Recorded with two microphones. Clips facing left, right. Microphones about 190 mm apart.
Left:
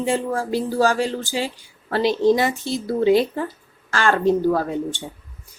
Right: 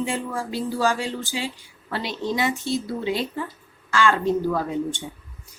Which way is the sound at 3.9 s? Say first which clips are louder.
Even; 55° left (ahead or behind).